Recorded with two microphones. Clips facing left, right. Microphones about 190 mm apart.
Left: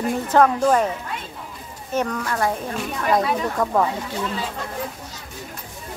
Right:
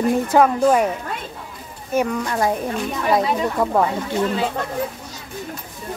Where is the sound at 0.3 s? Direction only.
10° right (ahead or behind).